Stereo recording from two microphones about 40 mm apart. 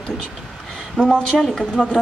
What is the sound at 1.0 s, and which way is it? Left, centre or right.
Speech, left.